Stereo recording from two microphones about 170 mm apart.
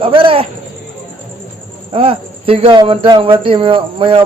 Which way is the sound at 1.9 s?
35° right (ahead or behind).